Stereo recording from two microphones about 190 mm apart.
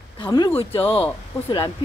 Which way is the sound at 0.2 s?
25° left (ahead or behind).